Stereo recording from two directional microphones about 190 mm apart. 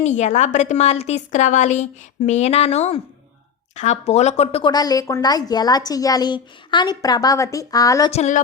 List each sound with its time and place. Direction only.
0.0 s a woman's voice: 40° left (ahead or behind); by 8.1 s 20° left (ahead or behind)
8.1 s a woman's voice: 35° left (ahead or behind)